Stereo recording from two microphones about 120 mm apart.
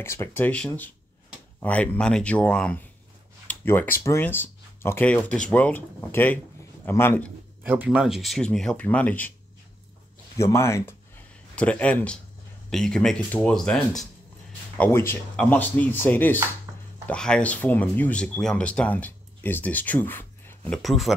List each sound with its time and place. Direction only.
0.0 s a man's voice: 20° left (ahead or behind)
7.6 s speech: 15° right (ahead or behind); by 9.3 s 15° left (ahead or behind)
10.3 s speech: 25° left (ahead or behind)
11.5 s a man's voice: 10° left (ahead or behind)
14.8 s a man's voice: 20° left (ahead or behind)
20.7 s speech: centre (ahead or behind)